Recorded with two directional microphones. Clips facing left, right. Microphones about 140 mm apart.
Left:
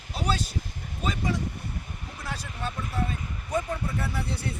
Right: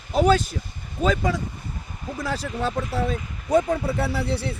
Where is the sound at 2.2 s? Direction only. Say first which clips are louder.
Right 9 dB; 90° right; by 4.6 s 70° right (ahead or behind).